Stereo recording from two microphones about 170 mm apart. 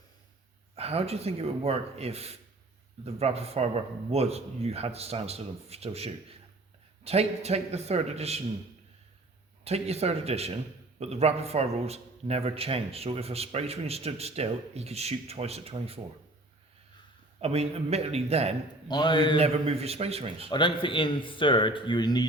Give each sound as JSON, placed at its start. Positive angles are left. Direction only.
{"t": 0.8, "sound": "a man's voice", "side_deg": -35}
{"t": 9.6, "sound": "a man's voice", "side_deg": -40}
{"t": 17.4, "sound": "a man's voice", "side_deg": -35}
{"t": 18.9, "sound": "speech", "side_deg": 25}
{"t": 19.4, "sound": "a man's voice", "side_deg": -35}
{"t": 20.5, "sound": "speech", "side_deg": 30}